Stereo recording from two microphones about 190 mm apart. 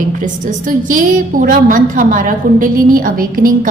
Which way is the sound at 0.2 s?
45° right (ahead or behind).